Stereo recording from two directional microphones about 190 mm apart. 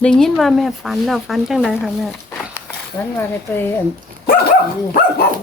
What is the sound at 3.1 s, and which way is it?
Speech, 10° left (ahead or behind).